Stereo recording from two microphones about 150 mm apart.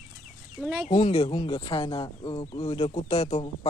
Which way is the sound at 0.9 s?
40° left (ahead or behind).